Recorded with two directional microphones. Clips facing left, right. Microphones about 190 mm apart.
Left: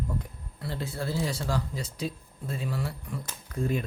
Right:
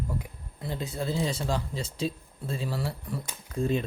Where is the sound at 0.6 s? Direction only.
20° right (ahead or behind).